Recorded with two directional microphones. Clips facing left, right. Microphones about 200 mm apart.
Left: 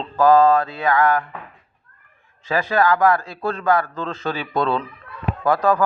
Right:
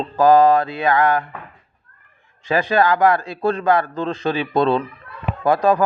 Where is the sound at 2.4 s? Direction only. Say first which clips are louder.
Right 2 dB; 15° right (ahead or behind).